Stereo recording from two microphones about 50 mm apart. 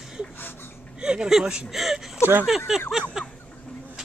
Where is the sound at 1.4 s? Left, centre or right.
Centre.